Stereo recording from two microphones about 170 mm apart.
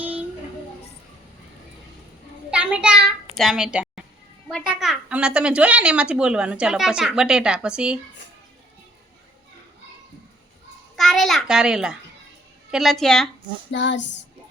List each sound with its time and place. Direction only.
2.5 s a sound: 5° right (ahead or behind)
4.4 s a woman's voice: centre (ahead or behind)
10.9 s a woman's voice: centre (ahead or behind)
13.7 s child singing: 90° left